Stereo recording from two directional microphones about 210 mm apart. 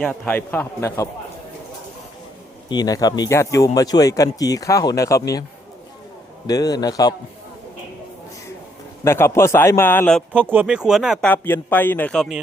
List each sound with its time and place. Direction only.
0.0 s speech: 5° left (ahead or behind)
2.6 s speech: 20° left (ahead or behind)
6.5 s speech: 20° left (ahead or behind)
9.0 s speech: 10° left (ahead or behind)
10.5 s speech: 5° right (ahead or behind)
11.3 s speech: 10° left (ahead or behind)